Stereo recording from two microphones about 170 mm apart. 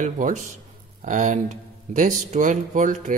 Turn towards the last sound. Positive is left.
turn(degrees=-50)  # may be behind; listen again after turning